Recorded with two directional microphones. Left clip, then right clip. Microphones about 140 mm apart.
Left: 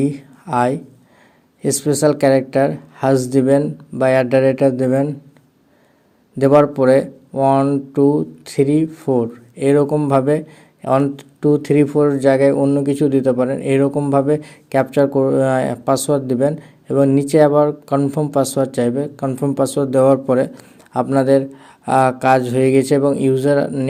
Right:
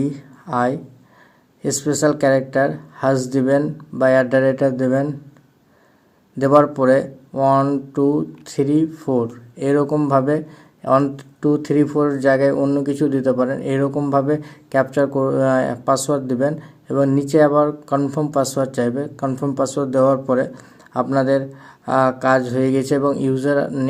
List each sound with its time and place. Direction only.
0.0 s a man's voice: 30° left (ahead or behind)
6.4 s a man's voice: 25° left (ahead or behind)